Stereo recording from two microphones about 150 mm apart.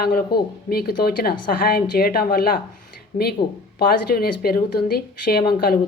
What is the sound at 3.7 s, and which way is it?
Speech, 80° left.